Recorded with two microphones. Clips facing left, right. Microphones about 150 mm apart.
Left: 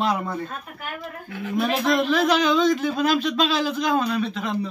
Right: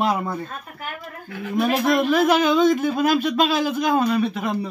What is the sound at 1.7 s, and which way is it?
A man's voice, 15° right (ahead or behind).